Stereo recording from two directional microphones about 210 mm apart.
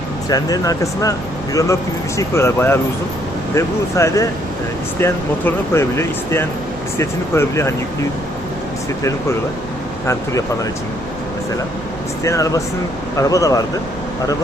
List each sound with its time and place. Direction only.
0.3 s speech: 15° left (ahead or behind)
10.1 s speech: 15° left (ahead or behind)
12.2 s speech: 15° left (ahead or behind)